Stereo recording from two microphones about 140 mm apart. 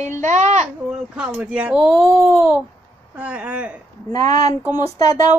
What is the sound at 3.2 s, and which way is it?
Speech, 10° right (ahead or behind).